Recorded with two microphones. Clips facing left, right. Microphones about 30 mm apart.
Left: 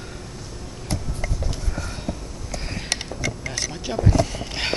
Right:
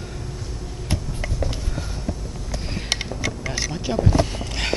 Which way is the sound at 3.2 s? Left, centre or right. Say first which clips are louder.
Right 1 dB; centre.